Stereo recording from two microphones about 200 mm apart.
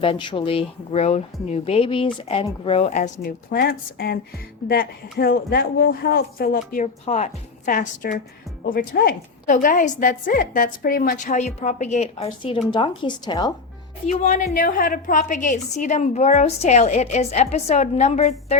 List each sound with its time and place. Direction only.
0.0 s a woman's voice: 25° left (ahead or behind)
3.2 s speech: 50° left (ahead or behind)
7.0 s a woman's voice: 35° left (ahead or behind)
14.1 s a woman's voice: 35° left (ahead or behind)